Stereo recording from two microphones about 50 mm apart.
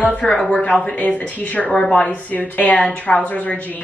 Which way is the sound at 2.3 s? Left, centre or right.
Left.